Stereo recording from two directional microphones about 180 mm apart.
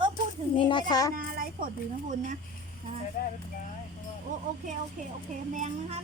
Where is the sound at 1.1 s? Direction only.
50° right (ahead or behind).